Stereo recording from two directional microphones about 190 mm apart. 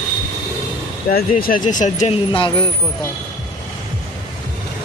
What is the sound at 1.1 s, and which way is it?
Speech, 50° left (ahead or behind).